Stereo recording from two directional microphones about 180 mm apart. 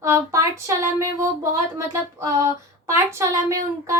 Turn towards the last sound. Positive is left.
turn(degrees=-15)  # may be behind; listen again after turning